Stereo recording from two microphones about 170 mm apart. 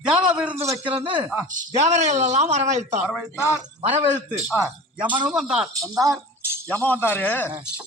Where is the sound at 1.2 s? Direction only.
5° right (ahead or behind).